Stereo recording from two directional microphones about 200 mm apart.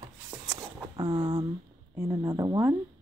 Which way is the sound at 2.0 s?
15° right (ahead or behind).